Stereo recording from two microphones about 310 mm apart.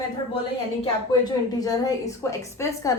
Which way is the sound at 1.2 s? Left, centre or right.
Centre.